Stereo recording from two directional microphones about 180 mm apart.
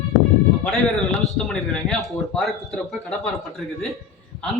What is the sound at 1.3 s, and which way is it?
A man's voice, centre (ahead or behind).